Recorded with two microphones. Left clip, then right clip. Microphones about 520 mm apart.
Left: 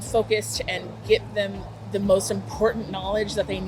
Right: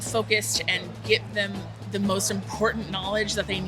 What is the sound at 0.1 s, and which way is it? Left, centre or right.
Speech, right.